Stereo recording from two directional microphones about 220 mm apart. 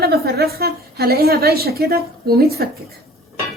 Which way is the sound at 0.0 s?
45° right (ahead or behind).